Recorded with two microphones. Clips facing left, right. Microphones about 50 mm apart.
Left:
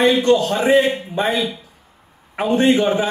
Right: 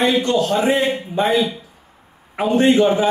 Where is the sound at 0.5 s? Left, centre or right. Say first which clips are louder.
Left 2 dB; centre.